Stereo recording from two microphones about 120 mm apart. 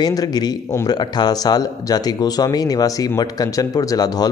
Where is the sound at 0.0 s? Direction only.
35° left (ahead or behind).